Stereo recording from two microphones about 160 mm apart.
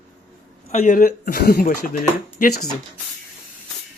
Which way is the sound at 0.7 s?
45° left (ahead or behind).